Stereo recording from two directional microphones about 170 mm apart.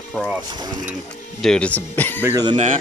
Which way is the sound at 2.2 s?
20° right (ahead or behind).